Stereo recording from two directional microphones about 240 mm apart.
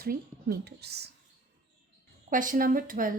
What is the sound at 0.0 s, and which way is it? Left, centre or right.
Speech, right.